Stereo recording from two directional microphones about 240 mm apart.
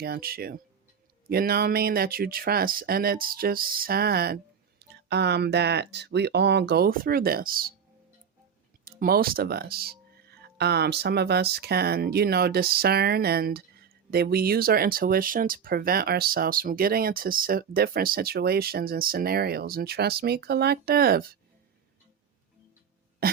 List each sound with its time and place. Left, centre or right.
0.0 s speech: right
8.8 s speech: right